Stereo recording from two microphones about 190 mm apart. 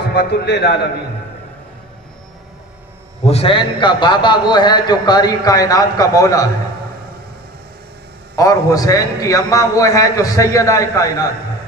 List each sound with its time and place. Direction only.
0.1 s a man's voice: 60° left (ahead or behind)
3.3 s a man's voice: 30° left (ahead or behind)
8.4 s a man's voice: 15° left (ahead or behind)